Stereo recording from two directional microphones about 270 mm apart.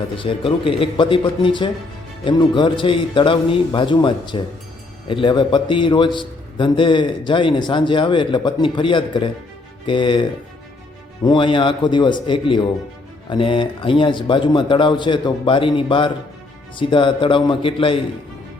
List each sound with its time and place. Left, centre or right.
0.2 s a man's voice: centre